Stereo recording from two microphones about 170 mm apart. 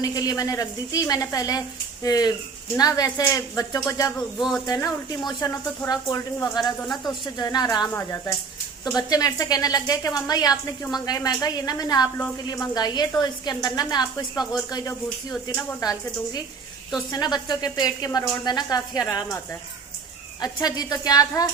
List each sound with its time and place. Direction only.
0.0 s speech: 20° left (ahead or behind)
4.4 s speech: centre (ahead or behind)
4.6 s speech: 20° left (ahead or behind)
6.8 s speech: centre (ahead or behind)
7.1 s speech: 25° left (ahead or behind)
20.4 s speech: 25° left (ahead or behind)